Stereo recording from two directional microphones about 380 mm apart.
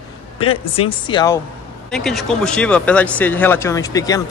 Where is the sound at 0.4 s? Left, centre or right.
Centre.